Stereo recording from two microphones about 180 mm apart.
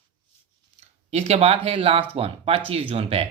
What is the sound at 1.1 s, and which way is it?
Speech, 35° right (ahead or behind).